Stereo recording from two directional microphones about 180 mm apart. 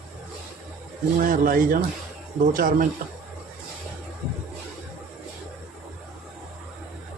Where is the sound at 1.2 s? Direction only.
50° right (ahead or behind).